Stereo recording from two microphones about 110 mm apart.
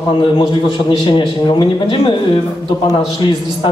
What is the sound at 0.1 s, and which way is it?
A man's voice, 45° left (ahead or behind).